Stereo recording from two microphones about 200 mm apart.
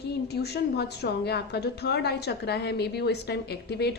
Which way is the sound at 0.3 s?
55° left (ahead or behind).